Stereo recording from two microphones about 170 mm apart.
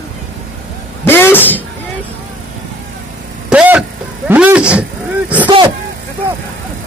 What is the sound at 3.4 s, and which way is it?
Vehicle, 5° right (ahead or behind).